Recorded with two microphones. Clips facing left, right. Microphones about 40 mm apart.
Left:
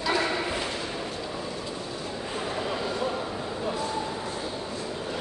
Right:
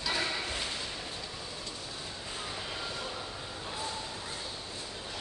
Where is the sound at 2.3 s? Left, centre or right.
Left.